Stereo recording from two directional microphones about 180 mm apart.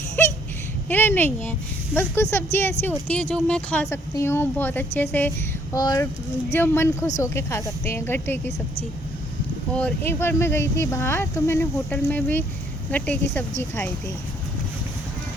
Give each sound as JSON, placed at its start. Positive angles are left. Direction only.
{"t": 0.2, "sound": "a sound", "side_deg": 10}
{"t": 0.9, "sound": "speech", "side_deg": 10}
{"t": 9.7, "sound": "speech", "side_deg": 10}